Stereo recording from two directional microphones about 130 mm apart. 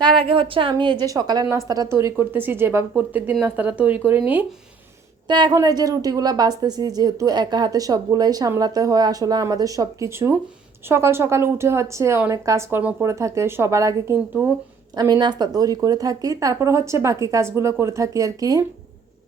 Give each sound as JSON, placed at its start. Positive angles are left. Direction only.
{"t": 0.0, "sound": "a woman's voice", "side_deg": -40}
{"t": 5.3, "sound": "a woman's voice", "side_deg": -30}